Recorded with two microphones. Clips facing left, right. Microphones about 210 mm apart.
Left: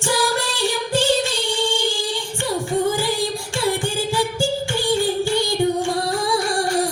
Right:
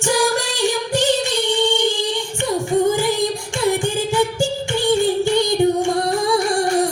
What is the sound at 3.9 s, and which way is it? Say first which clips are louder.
Music: right 3 dB; 20° right (ahead or behind).